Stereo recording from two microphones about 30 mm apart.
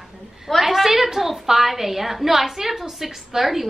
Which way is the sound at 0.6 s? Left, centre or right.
Centre.